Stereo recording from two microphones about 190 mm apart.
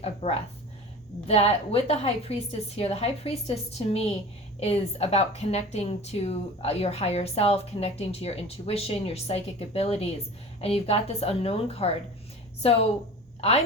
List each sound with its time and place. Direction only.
0.0 s a woman's voice: 30° left (ahead or behind)